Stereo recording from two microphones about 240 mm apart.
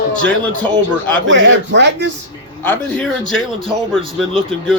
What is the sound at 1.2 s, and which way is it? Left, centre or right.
Speech, right.